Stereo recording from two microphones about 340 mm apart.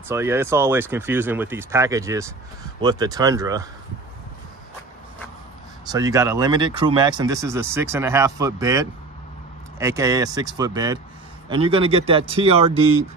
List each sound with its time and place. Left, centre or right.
0.1 s speech: centre
5.9 s speech: centre